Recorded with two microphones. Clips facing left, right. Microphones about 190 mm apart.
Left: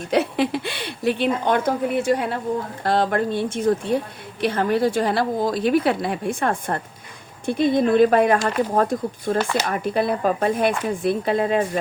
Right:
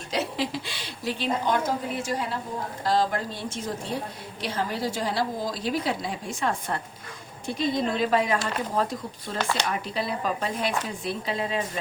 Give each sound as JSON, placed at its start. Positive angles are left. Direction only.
{"t": 0.1, "sound": "a woman's voice", "side_deg": 60}